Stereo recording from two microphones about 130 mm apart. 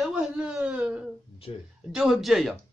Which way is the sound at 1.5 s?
45° left (ahead or behind).